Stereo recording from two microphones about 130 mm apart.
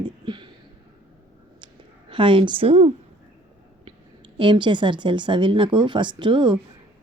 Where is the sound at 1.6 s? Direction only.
40° right (ahead or behind).